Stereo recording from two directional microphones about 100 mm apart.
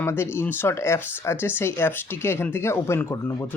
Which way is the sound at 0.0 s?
25° left (ahead or behind).